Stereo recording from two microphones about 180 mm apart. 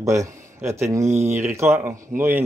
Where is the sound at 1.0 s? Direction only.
40° right (ahead or behind).